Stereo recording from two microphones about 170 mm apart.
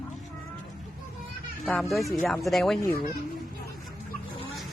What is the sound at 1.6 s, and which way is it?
A man's voice, centre (ahead or behind).